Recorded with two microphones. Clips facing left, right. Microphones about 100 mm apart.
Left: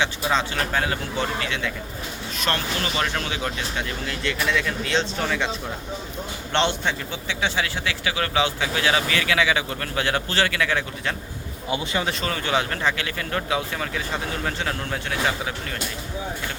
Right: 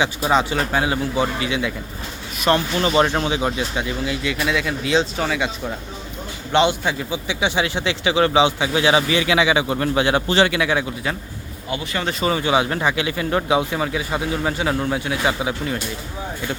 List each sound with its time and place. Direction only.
0.0 s speech: 15° right (ahead or behind)
6.5 s a man's voice: 5° right (ahead or behind)
11.7 s speech: 20° left (ahead or behind)
12.2 s speech: 15° right (ahead or behind)